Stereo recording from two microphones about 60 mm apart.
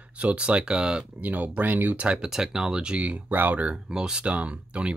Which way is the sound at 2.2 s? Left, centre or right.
Centre.